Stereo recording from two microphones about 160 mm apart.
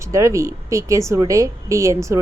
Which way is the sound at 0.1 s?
20° right (ahead or behind).